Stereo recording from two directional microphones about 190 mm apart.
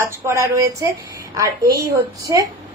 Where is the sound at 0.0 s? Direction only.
15° right (ahead or behind).